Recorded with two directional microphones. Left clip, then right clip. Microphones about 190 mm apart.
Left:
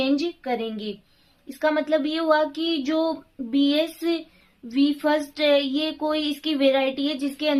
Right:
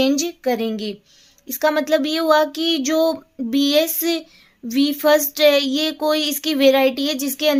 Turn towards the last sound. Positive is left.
turn(degrees=-50)  # may be behind; listen again after turning